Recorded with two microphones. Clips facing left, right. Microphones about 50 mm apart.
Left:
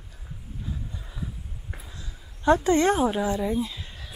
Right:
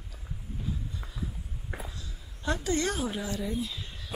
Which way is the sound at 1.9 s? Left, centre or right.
Left.